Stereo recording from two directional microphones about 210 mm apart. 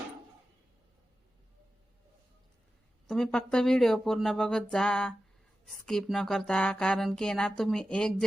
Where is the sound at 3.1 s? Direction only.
5° left (ahead or behind).